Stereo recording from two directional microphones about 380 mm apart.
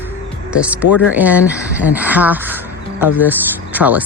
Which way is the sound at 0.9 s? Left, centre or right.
Left.